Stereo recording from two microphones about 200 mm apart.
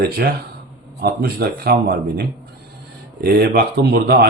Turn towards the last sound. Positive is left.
turn(degrees=-50)  # may be behind; listen again after turning